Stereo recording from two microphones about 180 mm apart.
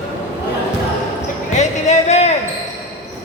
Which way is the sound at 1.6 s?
40° left (ahead or behind).